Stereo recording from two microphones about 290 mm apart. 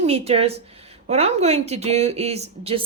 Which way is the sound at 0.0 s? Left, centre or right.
Right.